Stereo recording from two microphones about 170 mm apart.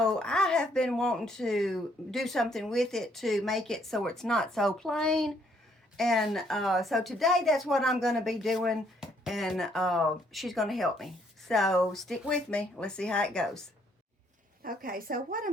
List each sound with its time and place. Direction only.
0.0 s a woman's voice: 5° left (ahead or behind)
14.6 s a woman's voice: 60° right (ahead or behind)